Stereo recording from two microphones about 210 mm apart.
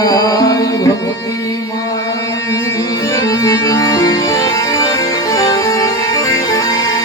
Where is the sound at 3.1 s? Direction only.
15° left (ahead or behind).